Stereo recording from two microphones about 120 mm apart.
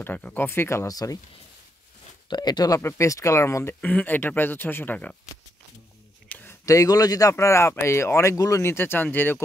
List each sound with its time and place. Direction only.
0.0 s speech: 15° left (ahead or behind); by 1.2 s 30° left (ahead or behind)
2.2 s speech: 40° left (ahead or behind)
2.8 s speech: 25° left (ahead or behind)
6.2 s a sound: 15° left (ahead or behind)
6.6 s speech: 30° left (ahead or behind)